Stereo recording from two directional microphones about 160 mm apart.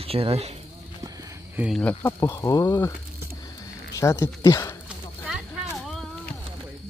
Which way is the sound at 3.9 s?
20° left (ahead or behind).